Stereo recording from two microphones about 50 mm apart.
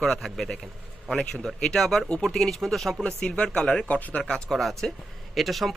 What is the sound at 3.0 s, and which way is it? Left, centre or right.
Speech, centre.